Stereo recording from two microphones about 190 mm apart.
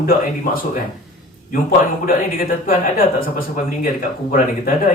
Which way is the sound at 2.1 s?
50° left (ahead or behind).